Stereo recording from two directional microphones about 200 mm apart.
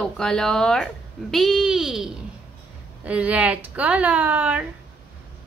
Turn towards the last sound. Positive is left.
turn(degrees=-10)  # may be behind; listen again after turning